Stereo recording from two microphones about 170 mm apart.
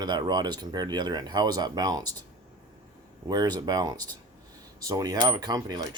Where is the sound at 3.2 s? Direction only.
25° right (ahead or behind).